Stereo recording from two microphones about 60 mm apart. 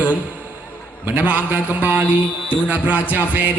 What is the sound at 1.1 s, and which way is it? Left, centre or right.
A man's voice, right.